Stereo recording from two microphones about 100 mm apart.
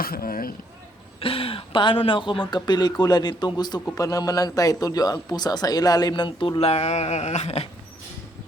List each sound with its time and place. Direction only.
1.2 s a man's voice: 70° left (ahead or behind); by 6.6 s 50° left (ahead or behind)
6.6 s speech: 90° left